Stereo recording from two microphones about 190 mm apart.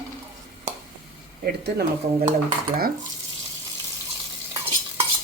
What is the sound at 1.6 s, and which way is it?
Speech, 55° right (ahead or behind).